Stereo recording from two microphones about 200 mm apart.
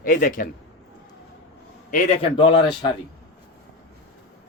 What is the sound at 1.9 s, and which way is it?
Speech, 35° left (ahead or behind).